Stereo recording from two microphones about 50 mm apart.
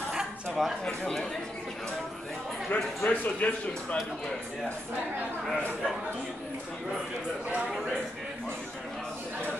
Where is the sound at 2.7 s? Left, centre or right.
Left.